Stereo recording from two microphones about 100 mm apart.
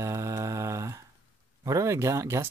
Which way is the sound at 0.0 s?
30° right (ahead or behind).